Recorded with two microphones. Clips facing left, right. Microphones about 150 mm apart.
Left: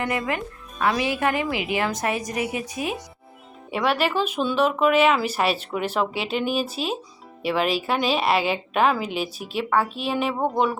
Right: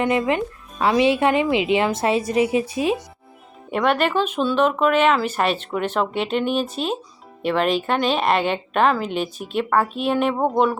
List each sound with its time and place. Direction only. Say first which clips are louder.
0.0 s speech: right 6 dB; 20° right (ahead or behind)
3.7 s a woman's voice: right 3 dB; 5° left (ahead or behind)